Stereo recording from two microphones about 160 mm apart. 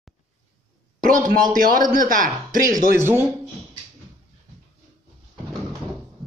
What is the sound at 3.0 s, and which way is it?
Speech, 15° right (ahead or behind).